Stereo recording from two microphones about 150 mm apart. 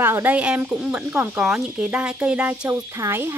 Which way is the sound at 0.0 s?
15° right (ahead or behind).